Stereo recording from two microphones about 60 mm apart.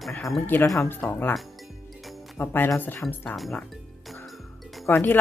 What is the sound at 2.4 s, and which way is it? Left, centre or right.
Speech, left.